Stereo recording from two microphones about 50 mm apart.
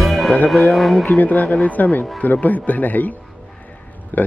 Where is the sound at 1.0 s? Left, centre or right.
Left.